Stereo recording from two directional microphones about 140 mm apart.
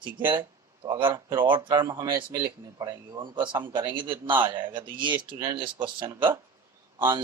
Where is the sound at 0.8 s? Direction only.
35° right (ahead or behind).